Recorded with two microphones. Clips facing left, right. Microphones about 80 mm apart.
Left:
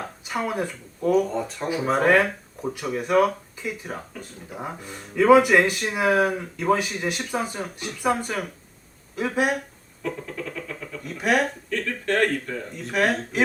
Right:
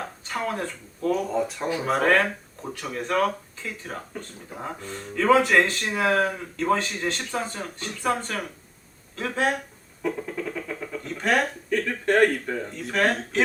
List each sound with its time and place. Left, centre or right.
0.3 s speech: centre
1.3 s speech: centre
10.0 s a sound: centre
11.0 s speech: centre
11.7 s speech: centre
12.7 s speech: centre